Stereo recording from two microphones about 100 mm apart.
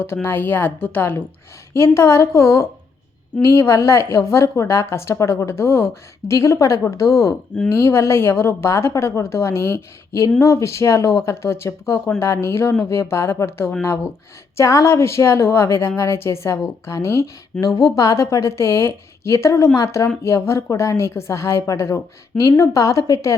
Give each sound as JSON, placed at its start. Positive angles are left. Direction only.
{"t": 0.0, "sound": "a woman's voice", "side_deg": 25}